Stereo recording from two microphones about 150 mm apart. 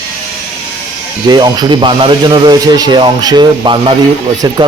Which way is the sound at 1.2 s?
30° right (ahead or behind).